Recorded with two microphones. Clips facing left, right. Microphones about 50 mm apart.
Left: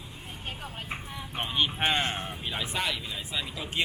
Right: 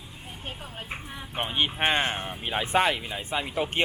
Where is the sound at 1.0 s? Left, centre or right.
Right.